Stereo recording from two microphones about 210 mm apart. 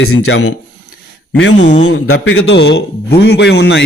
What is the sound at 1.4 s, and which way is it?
A man's voice, 60° left (ahead or behind).